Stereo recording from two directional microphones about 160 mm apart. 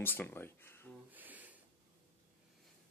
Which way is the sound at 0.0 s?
10° left (ahead or behind).